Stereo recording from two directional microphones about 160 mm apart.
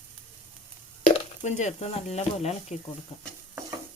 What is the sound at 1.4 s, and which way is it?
Speech, 45° left (ahead or behind).